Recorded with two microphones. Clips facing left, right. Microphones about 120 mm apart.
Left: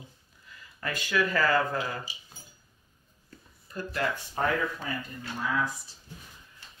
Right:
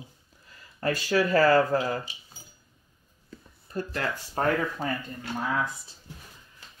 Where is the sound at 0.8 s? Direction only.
35° right (ahead or behind).